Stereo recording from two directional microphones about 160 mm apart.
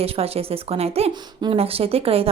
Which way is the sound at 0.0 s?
40° right (ahead or behind).